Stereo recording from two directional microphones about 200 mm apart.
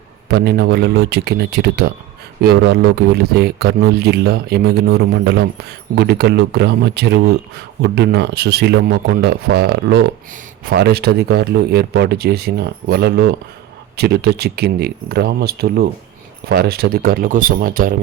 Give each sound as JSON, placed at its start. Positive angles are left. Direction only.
{"t": 0.3, "sound": "speech", "side_deg": -55}